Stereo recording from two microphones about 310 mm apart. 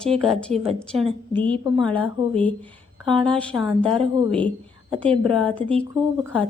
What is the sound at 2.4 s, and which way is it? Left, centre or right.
A woman's voice, centre.